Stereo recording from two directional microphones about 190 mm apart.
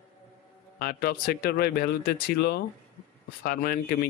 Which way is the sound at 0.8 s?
50° left (ahead or behind).